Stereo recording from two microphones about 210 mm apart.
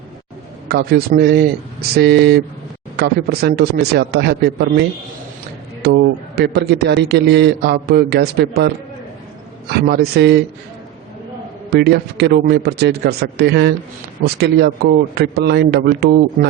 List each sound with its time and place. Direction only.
0.7 s a man's voice: 50° right (ahead or behind)
11.7 s a man's voice: 50° right (ahead or behind)